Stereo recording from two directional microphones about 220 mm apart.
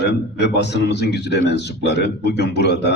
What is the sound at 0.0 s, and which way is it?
A man's voice, 50° left (ahead or behind).